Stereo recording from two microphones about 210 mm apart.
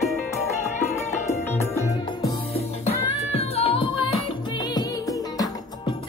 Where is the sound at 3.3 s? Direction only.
30° left (ahead or behind).